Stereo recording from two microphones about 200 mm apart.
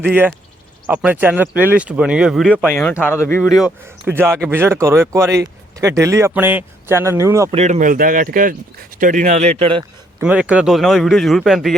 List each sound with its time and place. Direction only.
0.0 s a man's voice: 5° right (ahead or behind)
2.6 s speech: 10° left (ahead or behind)
3.5 s speech: 5° right (ahead or behind)
7.5 s speech: 35° right (ahead or behind)
10.2 s a man's voice: 5° right (ahead or behind)